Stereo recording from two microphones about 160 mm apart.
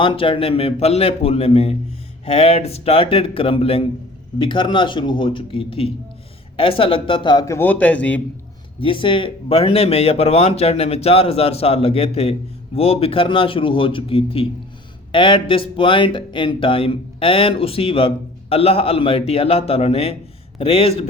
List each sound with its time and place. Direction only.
0.0 s a man's voice: 30° left (ahead or behind); by 8.2 s 10° left (ahead or behind)
8.8 s speech: 30° left (ahead or behind)